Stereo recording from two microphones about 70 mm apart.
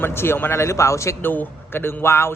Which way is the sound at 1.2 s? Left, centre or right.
Left.